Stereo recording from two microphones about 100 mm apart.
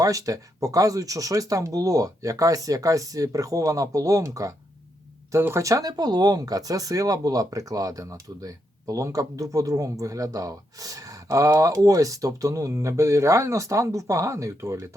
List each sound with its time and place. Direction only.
0.0 s speech: 35° right (ahead or behind)